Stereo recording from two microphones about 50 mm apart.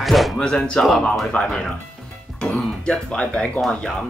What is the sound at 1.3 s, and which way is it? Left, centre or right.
Speech, left.